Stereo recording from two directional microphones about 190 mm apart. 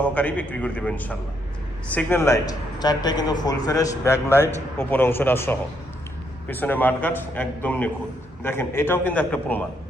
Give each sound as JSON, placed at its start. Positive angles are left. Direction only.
{"t": 0.0, "sound": "a man's voice", "side_deg": 10}
{"t": 4.3, "sound": "a man's voice", "side_deg": -10}
{"t": 4.8, "sound": "speech", "side_deg": 10}